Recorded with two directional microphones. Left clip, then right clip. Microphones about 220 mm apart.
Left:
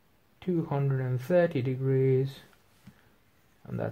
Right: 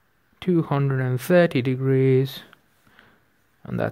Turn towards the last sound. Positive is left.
turn(degrees=-40)  # may be behind; listen again after turning